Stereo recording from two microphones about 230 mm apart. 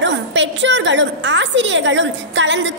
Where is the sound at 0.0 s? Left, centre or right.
Right.